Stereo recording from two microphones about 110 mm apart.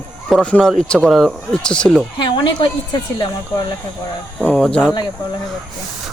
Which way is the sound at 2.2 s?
45° left (ahead or behind).